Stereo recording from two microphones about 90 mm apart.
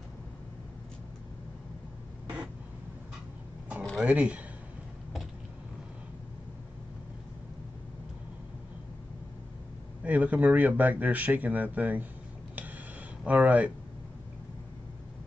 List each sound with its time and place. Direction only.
3.9 s speech: 15° right (ahead or behind)
10.0 s speech: 20° right (ahead or behind)
12.5 s a sound: 20° right (ahead or behind)